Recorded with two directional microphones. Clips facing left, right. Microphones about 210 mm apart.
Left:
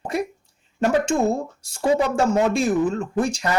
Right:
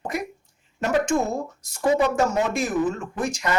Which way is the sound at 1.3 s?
30° left (ahead or behind).